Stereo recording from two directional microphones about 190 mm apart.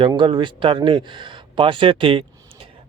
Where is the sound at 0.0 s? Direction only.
25° right (ahead or behind).